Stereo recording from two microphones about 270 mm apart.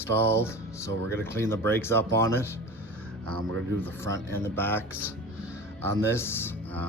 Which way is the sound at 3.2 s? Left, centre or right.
Right.